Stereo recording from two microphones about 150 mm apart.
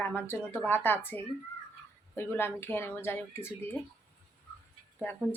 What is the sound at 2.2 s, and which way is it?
A woman's voice, 15° left (ahead or behind).